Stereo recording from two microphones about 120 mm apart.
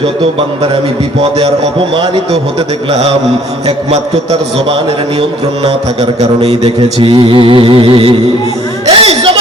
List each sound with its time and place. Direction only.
0.0 s speech: 50° right (ahead or behind)
3.7 s a man's voice: 60° right (ahead or behind)
5.6 s speech: 60° right (ahead or behind)
8.9 s a sound: 55° right (ahead or behind)